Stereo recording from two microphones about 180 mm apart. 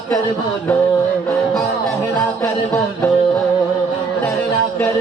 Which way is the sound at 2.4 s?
15° left (ahead or behind).